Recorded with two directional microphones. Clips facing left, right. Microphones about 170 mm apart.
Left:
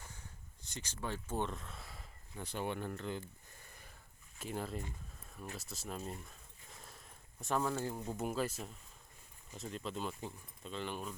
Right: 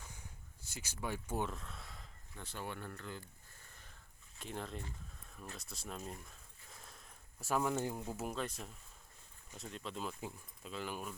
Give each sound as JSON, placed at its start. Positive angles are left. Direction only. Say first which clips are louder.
{"t": 0.7, "sound": "speech", "louder": "even", "side_deg": -10}
{"t": 2.3, "sound": "speech", "louder": "left 6 dB", "side_deg": 15}
{"t": 3.7, "sound": "sniff", "louder": "left 3 dB", "side_deg": 10}
{"t": 4.4, "sound": "speech", "louder": "left 3 dB", "side_deg": 5}
{"t": 6.1, "sound": "a sound", "louder": "left 2 dB", "side_deg": 0}
{"t": 7.9, "sound": "speech", "louder": "left 3 dB", "side_deg": -5}